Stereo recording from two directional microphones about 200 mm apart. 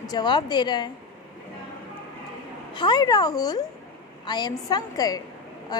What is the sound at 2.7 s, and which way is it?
A woman's voice, 25° left (ahead or behind).